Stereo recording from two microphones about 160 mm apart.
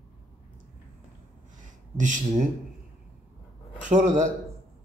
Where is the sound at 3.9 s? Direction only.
50° right (ahead or behind).